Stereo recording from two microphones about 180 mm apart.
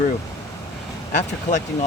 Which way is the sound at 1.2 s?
40° left (ahead or behind).